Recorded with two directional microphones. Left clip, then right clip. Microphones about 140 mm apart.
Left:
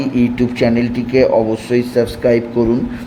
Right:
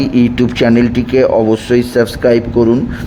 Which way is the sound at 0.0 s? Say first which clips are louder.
Right 4 dB; 25° right (ahead or behind).